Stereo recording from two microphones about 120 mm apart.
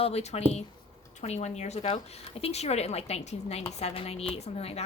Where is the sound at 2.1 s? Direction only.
55° left (ahead or behind).